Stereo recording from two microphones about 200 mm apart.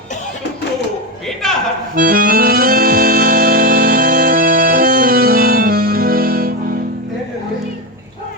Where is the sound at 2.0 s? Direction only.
45° right (ahead or behind).